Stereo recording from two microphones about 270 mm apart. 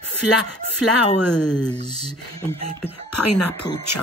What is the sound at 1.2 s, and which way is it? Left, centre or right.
Speech, left.